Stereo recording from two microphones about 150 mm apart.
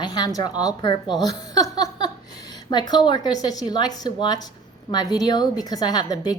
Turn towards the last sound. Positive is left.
turn(degrees=25)  # may be behind; listen again after turning